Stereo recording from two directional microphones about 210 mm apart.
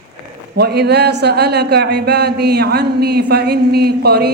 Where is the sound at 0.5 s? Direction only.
50° right (ahead or behind).